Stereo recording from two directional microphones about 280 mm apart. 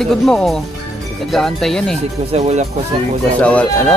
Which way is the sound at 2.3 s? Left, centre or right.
Right.